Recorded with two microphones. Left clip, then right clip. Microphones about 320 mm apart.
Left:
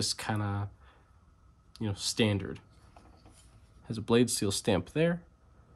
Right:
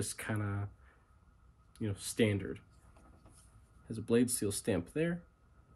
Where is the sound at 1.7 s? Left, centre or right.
Centre.